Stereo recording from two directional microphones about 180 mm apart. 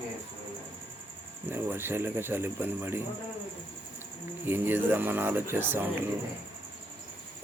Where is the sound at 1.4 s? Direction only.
10° right (ahead or behind).